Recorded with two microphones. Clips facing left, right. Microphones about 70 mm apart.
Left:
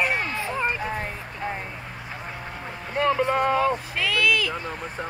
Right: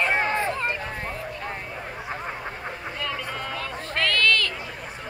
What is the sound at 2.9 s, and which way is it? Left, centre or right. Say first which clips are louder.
Boat: left 13 dB; left.